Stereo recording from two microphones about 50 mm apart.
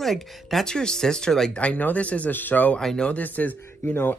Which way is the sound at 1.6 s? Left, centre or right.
Left.